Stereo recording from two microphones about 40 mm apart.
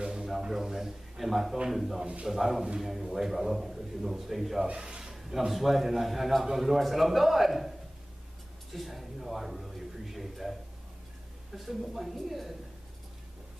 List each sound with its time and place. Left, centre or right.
0.0 s a sound: centre
1.7 s a man's voice: centre
4.7 s speech: centre
5.5 s a man's voice: centre
8.7 s a man's voice: centre
11.5 s a man's voice: centre